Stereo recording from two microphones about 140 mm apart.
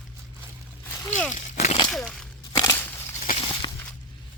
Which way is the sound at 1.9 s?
5° left (ahead or behind).